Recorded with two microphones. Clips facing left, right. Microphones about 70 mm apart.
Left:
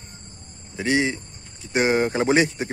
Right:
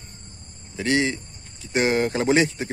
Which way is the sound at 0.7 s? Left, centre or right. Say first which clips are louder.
Even; left.